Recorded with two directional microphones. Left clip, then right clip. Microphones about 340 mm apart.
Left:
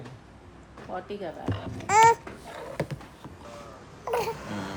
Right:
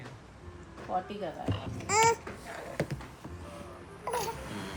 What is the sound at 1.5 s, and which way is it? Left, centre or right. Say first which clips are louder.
Babbling: left 8 dB; centre.